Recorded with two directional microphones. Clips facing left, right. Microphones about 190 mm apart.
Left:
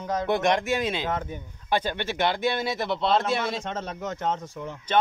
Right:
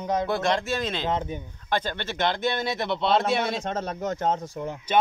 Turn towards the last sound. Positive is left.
turn(degrees=-40)  # may be behind; listen again after turning